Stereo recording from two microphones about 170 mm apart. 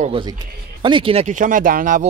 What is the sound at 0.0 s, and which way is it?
A man's voice, 30° right (ahead or behind).